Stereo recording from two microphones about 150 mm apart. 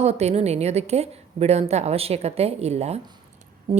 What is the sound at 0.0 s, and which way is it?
A woman's voice, 45° right (ahead or behind).